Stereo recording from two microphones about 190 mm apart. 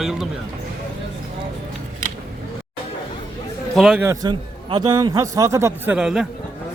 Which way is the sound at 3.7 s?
Centre (ahead or behind).